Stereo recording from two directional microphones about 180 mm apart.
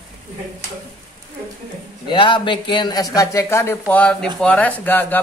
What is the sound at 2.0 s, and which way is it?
Speech, 25° left (ahead or behind).